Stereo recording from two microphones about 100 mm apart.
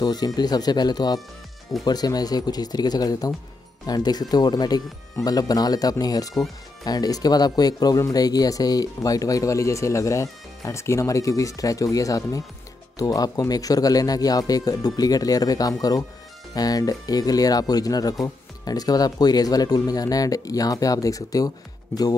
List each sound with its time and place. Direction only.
0.0 s speech: 45° left (ahead or behind)